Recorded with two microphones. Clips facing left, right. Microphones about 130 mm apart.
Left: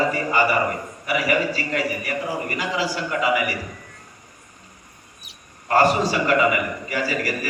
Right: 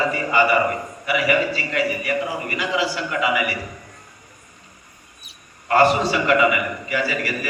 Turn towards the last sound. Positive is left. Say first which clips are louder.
# even
turn(degrees=40)  # may be behind; listen again after turning